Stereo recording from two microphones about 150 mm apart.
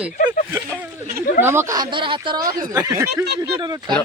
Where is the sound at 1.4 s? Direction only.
15° right (ahead or behind).